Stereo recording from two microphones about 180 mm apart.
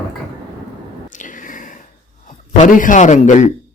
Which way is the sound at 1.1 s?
45° left (ahead or behind).